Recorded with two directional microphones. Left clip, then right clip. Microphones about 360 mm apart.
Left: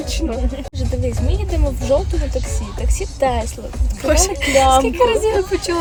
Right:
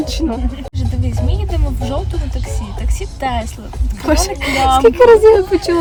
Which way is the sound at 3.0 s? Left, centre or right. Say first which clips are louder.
Left 2 dB; centre.